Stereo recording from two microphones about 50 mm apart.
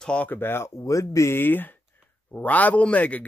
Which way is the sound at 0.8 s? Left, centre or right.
Left.